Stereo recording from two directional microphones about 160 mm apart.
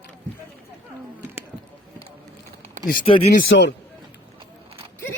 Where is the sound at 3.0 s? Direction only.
35° left (ahead or behind).